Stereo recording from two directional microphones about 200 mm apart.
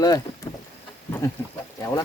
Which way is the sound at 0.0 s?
20° left (ahead or behind).